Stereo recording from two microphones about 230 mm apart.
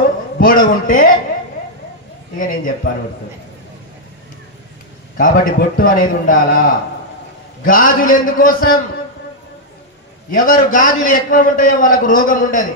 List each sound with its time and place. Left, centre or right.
0.4 s a man's voice: left
2.3 s a man's voice: left
5.1 s a man's voice: left
7.6 s a man's voice: left
10.3 s a man's voice: left